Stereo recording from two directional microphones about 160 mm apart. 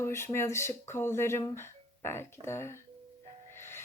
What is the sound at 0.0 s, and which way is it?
Speech, 15° left (ahead or behind).